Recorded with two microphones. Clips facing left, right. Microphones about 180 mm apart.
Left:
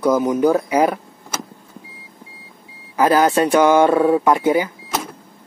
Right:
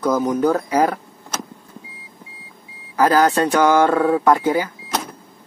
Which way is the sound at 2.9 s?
15° left (ahead or behind).